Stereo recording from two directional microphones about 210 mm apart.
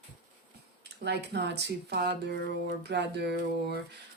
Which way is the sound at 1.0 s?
55° right (ahead or behind).